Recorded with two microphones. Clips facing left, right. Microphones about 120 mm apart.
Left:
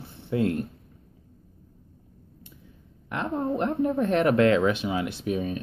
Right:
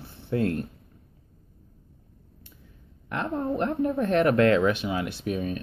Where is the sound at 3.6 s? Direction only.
20° left (ahead or behind).